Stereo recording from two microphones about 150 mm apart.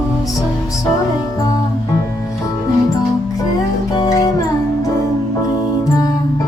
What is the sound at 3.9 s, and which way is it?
Music, 25° left (ahead or behind).